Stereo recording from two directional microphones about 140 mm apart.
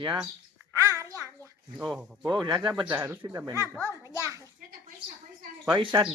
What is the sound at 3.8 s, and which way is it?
Speech, 20° left (ahead or behind).